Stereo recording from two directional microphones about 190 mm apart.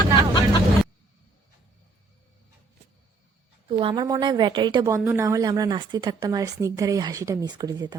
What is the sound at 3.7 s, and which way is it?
A woman's voice, 25° right (ahead or behind).